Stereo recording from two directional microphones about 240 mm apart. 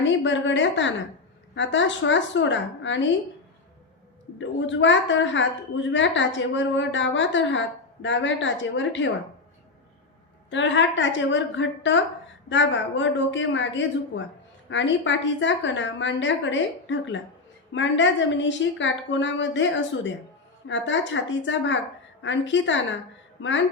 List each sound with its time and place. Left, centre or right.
0.0 s a woman's voice: left
4.4 s a woman's voice: left
10.5 s a woman's voice: left